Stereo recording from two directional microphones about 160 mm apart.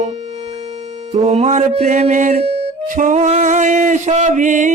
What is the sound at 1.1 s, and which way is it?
Music, 45° right (ahead or behind).